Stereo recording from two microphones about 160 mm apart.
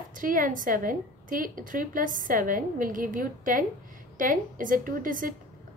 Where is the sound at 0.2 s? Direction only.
60° right (ahead or behind).